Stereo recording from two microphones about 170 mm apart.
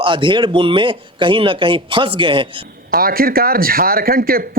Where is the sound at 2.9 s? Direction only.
60° right (ahead or behind).